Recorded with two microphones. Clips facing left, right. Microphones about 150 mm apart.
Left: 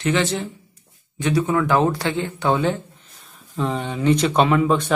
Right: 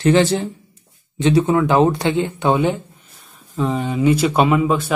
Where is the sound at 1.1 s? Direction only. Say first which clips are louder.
Right 5 dB; 25° right (ahead or behind).